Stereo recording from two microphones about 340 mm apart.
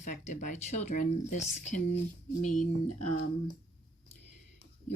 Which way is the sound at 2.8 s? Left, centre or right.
Left.